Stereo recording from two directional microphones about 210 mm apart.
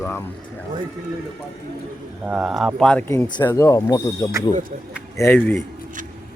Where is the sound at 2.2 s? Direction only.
5° right (ahead or behind).